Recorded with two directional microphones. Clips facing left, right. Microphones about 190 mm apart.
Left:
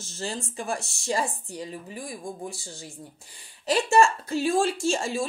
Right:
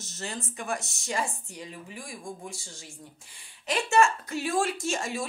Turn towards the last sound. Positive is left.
turn(degrees=30)  # may be behind; listen again after turning